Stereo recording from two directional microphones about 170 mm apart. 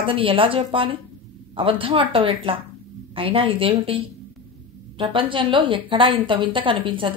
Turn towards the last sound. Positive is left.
turn(degrees=-30)  # may be behind; listen again after turning